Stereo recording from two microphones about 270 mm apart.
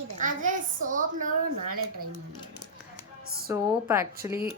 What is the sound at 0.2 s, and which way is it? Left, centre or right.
A child's voice, right.